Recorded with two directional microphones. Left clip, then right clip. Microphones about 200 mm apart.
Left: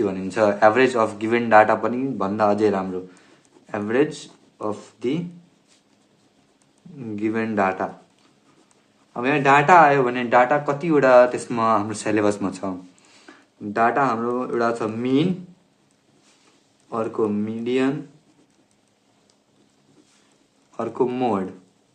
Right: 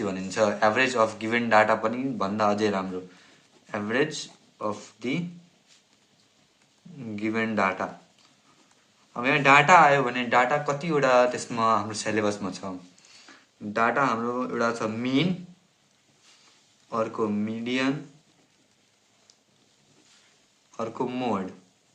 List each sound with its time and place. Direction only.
0.0 s a man's voice: 25° left (ahead or behind)
7.2 s a man's voice: 15° left (ahead or behind)
9.1 s a man's voice: 10° left (ahead or behind); by 12.7 s 35° left (ahead or behind)
13.3 s a sound: 25° left (ahead or behind)
13.7 s a man's voice: 15° left (ahead or behind)
16.9 s a man's voice: 10° left (ahead or behind)
20.7 s a man's voice: 20° left (ahead or behind)